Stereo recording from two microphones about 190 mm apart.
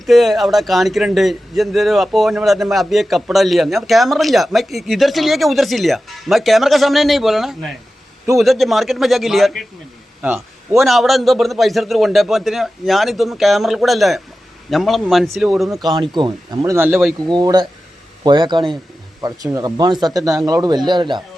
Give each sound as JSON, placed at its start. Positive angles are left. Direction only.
{"t": 0.0, "sound": "a man's voice", "side_deg": 0}
{"t": 15.8, "sound": "speech", "side_deg": -25}
{"t": 16.7, "sound": "speech", "side_deg": -10}
{"t": 17.2, "sound": "a man's voice", "side_deg": -20}